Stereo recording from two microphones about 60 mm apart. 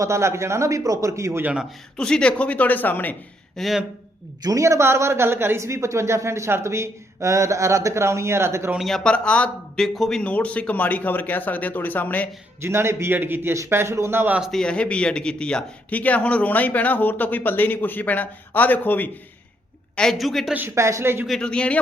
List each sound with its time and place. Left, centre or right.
0.0 s a man's voice: right
2.0 s speech: centre; by 3.2 s left
3.6 s speech: centre
4.6 s a woman's voice: right
9.0 s speech: centre
9.7 s speech: centre
10.2 s speech: left
12.6 s a woman's voice: right
13.7 s a man's voice: right
14.5 s speech: centre; by 19.1 s left
20.1 s speech: centre
20.7 s a woman's voice: right
21.4 s a man's voice: centre